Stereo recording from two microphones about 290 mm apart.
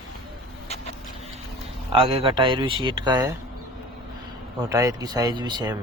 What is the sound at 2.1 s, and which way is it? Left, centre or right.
Speech, centre.